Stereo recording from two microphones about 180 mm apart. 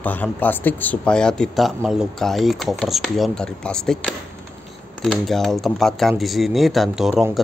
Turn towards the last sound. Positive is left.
turn(degrees=0)  # may be behind; listen again after turning